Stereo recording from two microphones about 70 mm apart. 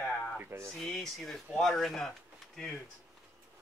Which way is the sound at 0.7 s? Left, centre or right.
Centre.